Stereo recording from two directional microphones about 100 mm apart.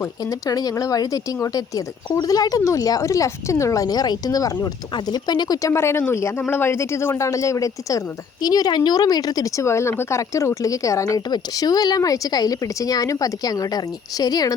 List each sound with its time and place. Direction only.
0.3 s speech: 40° left (ahead or behind)
5.7 s speech: 25° left (ahead or behind)